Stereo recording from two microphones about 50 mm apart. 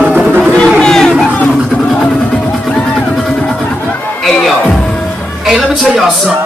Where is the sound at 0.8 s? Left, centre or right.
Centre.